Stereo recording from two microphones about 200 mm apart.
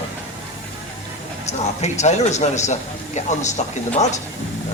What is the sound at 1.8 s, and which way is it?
Speech, 35° left (ahead or behind).